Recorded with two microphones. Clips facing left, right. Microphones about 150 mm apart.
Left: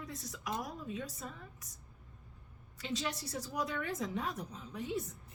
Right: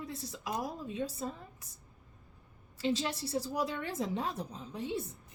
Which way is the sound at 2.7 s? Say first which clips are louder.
Right 6 dB; 30° right (ahead or behind).